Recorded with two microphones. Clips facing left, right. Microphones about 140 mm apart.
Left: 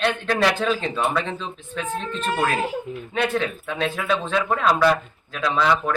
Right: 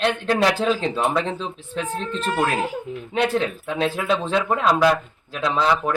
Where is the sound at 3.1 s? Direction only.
25° right (ahead or behind).